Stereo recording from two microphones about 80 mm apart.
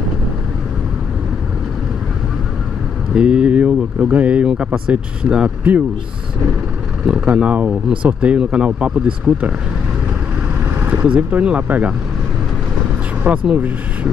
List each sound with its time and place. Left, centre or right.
3.2 s speech: centre
7.1 s speech: centre
10.8 s speech: right
13.2 s speech: centre